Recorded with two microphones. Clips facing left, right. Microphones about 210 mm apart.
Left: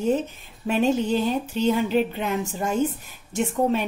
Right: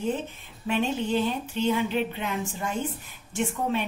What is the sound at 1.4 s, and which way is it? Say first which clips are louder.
A woman's voice: left 3 dB; 40° left (ahead or behind).